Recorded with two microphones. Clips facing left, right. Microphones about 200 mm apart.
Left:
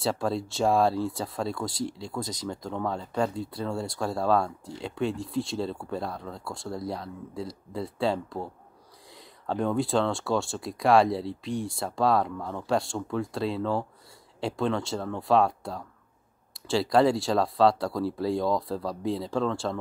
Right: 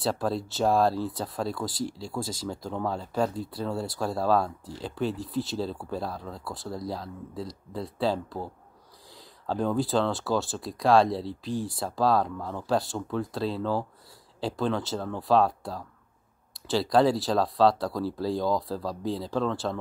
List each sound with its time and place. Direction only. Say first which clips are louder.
0.0 s speech: even; centre (ahead or behind)
1.9 s speech: even; 25° left (ahead or behind)
2.1 s speech: right 1 dB; 5° right (ahead or behind)